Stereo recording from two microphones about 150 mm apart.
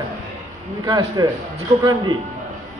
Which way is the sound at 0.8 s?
30° right (ahead or behind).